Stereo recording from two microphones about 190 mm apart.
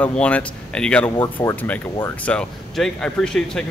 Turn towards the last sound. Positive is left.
turn(degrees=5)  # may be behind; listen again after turning